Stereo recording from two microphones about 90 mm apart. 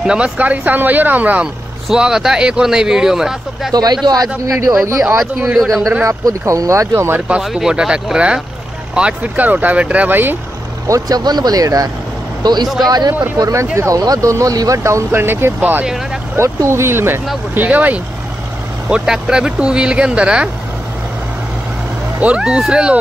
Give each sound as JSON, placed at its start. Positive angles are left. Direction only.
{"t": 0.0, "sound": "speech", "side_deg": -10}
{"t": 1.9, "sound": "speech", "side_deg": -5}
{"t": 3.7, "sound": "speech", "side_deg": -50}
{"t": 5.6, "sound": "speech", "side_deg": 0}
{"t": 6.0, "sound": "speech", "side_deg": -35}
{"t": 7.2, "sound": "speech", "side_deg": -10}
{"t": 10.9, "sound": "speech", "side_deg": -45}
{"t": 12.6, "sound": "speech", "side_deg": 0}
{"t": 13.4, "sound": "speech", "side_deg": -35}
{"t": 15.8, "sound": "speech", "side_deg": -5}
{"t": 16.3, "sound": "speech", "side_deg": -30}
{"t": 22.2, "sound": "speech", "side_deg": -10}